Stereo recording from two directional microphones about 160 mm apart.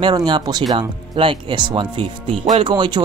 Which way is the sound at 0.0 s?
25° right (ahead or behind).